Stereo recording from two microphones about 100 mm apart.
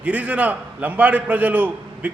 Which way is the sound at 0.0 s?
15° right (ahead or behind).